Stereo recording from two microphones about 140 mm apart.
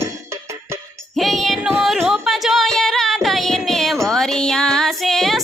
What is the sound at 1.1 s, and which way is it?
Music, centre (ahead or behind).